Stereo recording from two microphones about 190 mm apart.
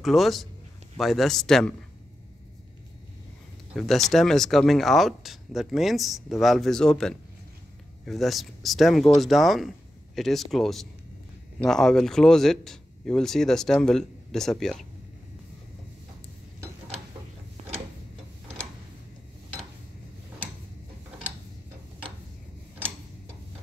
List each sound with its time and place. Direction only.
0.0 s speech: centre (ahead or behind)
3.7 s speech: centre (ahead or behind)
17.6 s mechanisms: 35° right (ahead or behind)